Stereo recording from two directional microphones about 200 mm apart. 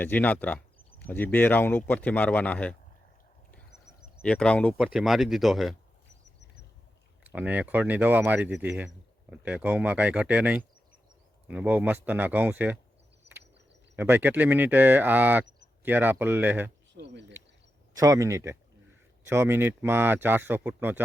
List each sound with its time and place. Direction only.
0.0 s speech: 10° left (ahead or behind)
3.5 s a sound: 5° left (ahead or behind)
4.8 s speech: 5° right (ahead or behind)
7.3 s speech: 5° right (ahead or behind)
13.3 s a sound: 60° right (ahead or behind)
13.9 s speech: 10° right (ahead or behind)
16.9 s speech: 60° right (ahead or behind)
17.9 s speech: 15° right (ahead or behind)